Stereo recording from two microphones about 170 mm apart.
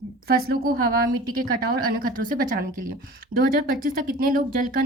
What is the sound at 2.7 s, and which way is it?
Speech, 55° right (ahead or behind).